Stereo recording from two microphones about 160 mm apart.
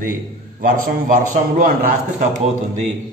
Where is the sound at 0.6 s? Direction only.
60° right (ahead or behind).